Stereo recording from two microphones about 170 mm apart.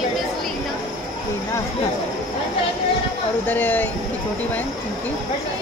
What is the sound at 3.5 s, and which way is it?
Speech, 10° left (ahead or behind).